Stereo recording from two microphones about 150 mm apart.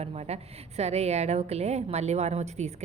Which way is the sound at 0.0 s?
45° right (ahead or behind).